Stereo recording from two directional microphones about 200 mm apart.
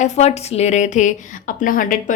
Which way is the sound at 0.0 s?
35° left (ahead or behind).